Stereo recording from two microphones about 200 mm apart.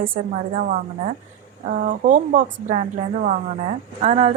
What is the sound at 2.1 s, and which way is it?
Speech, 40° right (ahead or behind).